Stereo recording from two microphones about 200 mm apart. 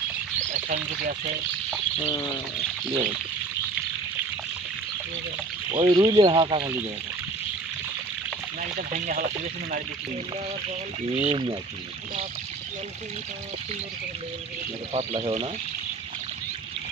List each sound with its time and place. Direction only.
0.5 s speech: 45° right (ahead or behind)
5.8 s speech: 25° right (ahead or behind)
8.7 s speech: 40° right (ahead or behind)
11.1 s speech: 30° right (ahead or behind)
15.0 s speech: 30° right (ahead or behind)